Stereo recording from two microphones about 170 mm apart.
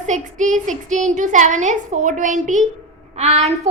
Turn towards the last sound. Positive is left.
turn(degrees=-40)  # may be behind; listen again after turning